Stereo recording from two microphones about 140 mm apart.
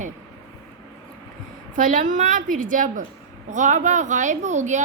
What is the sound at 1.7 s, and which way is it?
A woman's voice, 70° right (ahead or behind).